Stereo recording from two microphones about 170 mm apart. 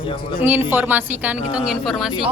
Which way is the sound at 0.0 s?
30° left (ahead or behind).